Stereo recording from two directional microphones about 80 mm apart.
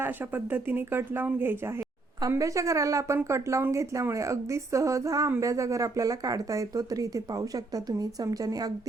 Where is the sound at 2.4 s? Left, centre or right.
Right.